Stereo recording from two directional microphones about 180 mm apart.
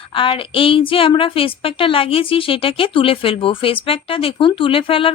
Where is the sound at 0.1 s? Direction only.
30° left (ahead or behind).